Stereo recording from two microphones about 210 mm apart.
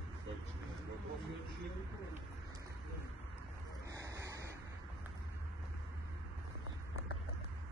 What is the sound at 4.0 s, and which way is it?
Vehicle, 15° right (ahead or behind).